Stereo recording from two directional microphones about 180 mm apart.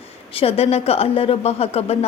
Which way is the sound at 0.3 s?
35° left (ahead or behind).